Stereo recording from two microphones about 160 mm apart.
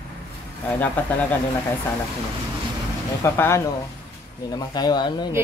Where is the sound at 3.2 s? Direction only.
15° left (ahead or behind).